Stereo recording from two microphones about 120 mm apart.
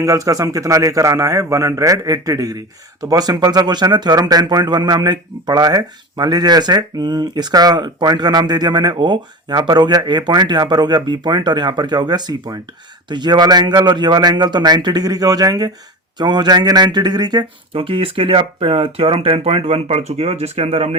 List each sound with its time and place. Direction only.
0.0 s a man's voice: 30° right (ahead or behind)
17.7 s speech: 50° right (ahead or behind)